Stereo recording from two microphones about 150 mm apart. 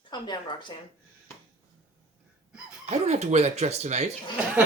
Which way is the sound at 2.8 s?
45° right (ahead or behind).